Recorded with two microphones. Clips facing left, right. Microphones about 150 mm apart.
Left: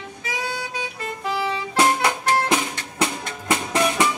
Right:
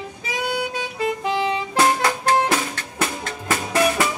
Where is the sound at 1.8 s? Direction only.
20° left (ahead or behind).